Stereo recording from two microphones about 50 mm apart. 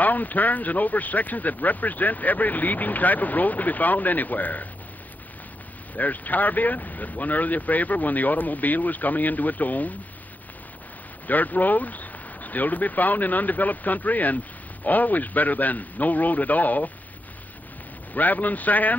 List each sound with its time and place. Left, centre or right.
0.0 s speech: left
5.9 s speech: left
11.2 s speech: left
18.1 s speech: left